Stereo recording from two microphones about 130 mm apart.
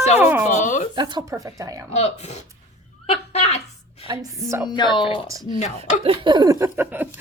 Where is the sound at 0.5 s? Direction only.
75° left (ahead or behind).